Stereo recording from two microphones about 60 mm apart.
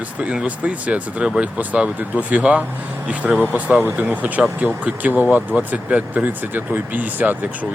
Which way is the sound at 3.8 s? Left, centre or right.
Right.